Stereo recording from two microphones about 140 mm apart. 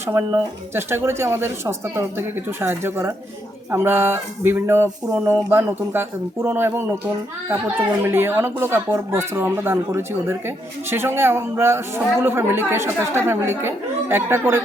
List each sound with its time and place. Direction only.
0.1 s speech: 15° right (ahead or behind)